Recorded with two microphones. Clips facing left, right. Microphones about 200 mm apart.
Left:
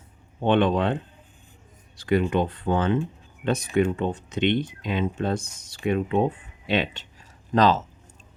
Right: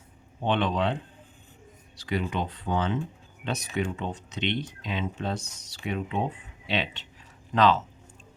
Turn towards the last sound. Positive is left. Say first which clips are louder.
# left 2 dB
turn(degrees=40)  # may be behind; listen again after turning